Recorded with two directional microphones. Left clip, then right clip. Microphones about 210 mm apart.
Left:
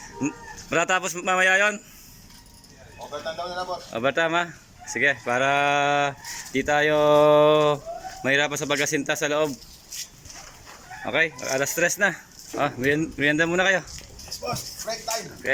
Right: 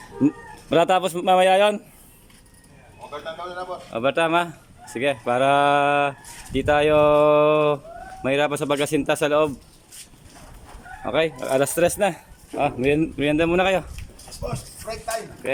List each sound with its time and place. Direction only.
0.2 s speech: 20° right (ahead or behind)
3.1 s speech: 5° left (ahead or behind)
3.9 s speech: 10° right (ahead or behind)
11.0 s speech: 10° right (ahead or behind)